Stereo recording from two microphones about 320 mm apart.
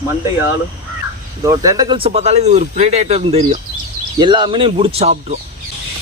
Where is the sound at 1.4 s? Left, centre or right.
Centre.